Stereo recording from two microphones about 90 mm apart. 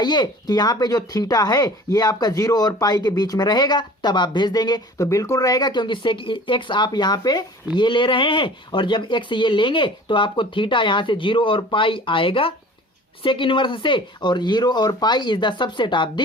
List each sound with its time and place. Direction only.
0.0 s speech: 55° left (ahead or behind)
4.9 s speech: 35° left (ahead or behind); by 12.5 s 85° left
13.2 s speech: 70° left (ahead or behind)